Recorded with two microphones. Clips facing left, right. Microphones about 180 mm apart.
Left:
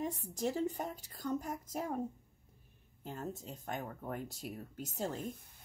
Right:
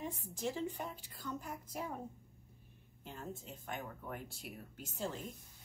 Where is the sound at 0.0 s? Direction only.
40° left (ahead or behind).